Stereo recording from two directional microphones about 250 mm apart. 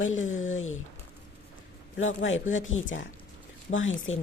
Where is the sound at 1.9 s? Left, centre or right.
Left.